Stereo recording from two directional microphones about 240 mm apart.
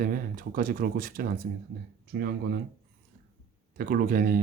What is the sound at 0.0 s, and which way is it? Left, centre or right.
Speech, right.